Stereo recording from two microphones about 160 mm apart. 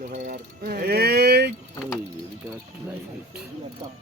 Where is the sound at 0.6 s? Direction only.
70° right (ahead or behind); by 1.5 s 90° right.